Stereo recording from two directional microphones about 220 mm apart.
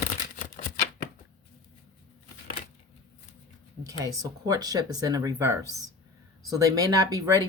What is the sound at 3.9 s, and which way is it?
A woman's voice, 15° right (ahead or behind).